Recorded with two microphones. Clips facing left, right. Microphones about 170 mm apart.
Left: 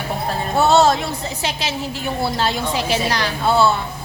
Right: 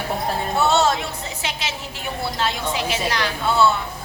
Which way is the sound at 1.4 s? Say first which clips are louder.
Left 3 dB; 35° left (ahead or behind).